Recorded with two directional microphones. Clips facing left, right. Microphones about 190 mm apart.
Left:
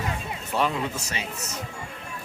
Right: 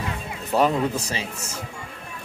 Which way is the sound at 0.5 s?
40° right (ahead or behind).